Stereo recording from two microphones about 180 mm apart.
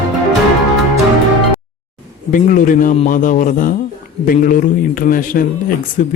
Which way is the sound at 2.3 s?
45° left (ahead or behind).